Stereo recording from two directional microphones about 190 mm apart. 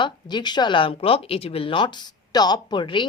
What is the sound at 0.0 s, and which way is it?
Speech, 25° left (ahead or behind).